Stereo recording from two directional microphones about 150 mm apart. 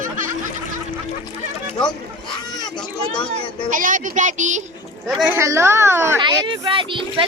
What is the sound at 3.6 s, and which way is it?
Speech, 60° right (ahead or behind).